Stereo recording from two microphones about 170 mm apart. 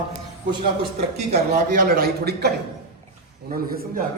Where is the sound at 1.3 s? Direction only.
50° right (ahead or behind); by 2.5 s 70° right (ahead or behind).